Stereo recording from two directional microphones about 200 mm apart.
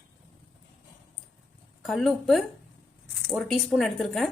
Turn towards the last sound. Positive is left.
turn(degrees=0)  # may be behind; listen again after turning